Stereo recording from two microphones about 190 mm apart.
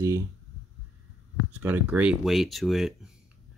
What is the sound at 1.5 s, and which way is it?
Speech, 10° right (ahead or behind).